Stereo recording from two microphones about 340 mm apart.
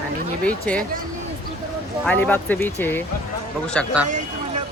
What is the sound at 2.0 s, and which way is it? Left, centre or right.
Speech, centre.